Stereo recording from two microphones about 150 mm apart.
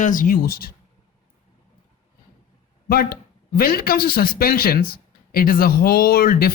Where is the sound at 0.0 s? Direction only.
60° left (ahead or behind); by 0.7 s 80° left.